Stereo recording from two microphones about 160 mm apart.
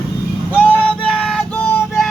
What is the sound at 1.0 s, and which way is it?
Vehicle, 5° left (ahead or behind).